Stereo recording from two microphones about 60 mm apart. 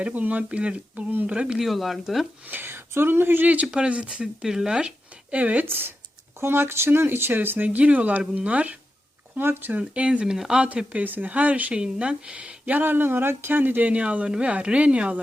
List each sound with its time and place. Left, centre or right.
0.1 s speech: right
1.5 s speech: centre
2.5 s speech: right; by 4.9 s centre
5.3 s speech: right
5.6 s speech: right
9.4 s speech: right
9.9 s speech: centre
10.9 s speech: right
12.8 s speech: right; by 15.2 s centre